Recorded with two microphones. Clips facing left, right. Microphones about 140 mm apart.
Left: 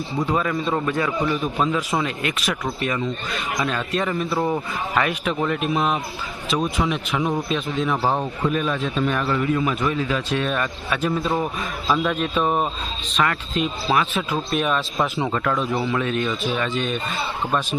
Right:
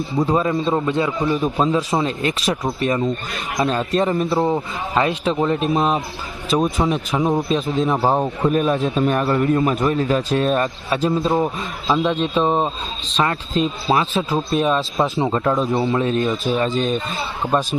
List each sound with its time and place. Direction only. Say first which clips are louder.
0.3 s a man's voice: right 3 dB; 30° right (ahead or behind)
7.2 s a man's voice: right 4 dB; 25° right (ahead or behind)
7.5 s a man's voice: right 4 dB; 35° right (ahead or behind)
8.0 s a man's voice: right 4 dB; 20° right (ahead or behind)
8.4 s a man's voice: right 5 dB; 40° right (ahead or behind)